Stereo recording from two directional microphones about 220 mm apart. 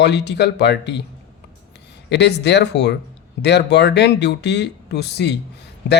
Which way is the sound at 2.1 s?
50° left (ahead or behind).